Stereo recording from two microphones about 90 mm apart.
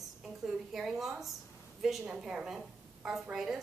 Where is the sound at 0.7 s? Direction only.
5° right (ahead or behind).